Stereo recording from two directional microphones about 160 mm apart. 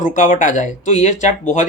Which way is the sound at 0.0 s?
55° left (ahead or behind).